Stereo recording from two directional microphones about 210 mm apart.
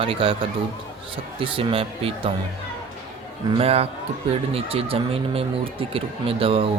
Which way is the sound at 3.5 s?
30° right (ahead or behind).